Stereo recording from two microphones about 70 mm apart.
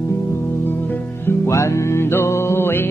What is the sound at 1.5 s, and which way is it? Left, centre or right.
Music, left.